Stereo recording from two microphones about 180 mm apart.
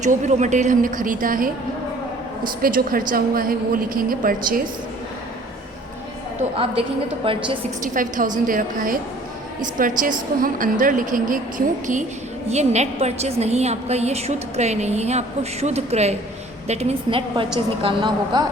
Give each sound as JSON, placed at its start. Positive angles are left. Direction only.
{"t": 0.0, "sound": "a woman's voice", "side_deg": -40}
{"t": 2.6, "sound": "a woman's voice", "side_deg": -50}
{"t": 7.3, "sound": "a woman's voice", "side_deg": -30}
{"t": 7.9, "sound": "a woman's voice", "side_deg": -50}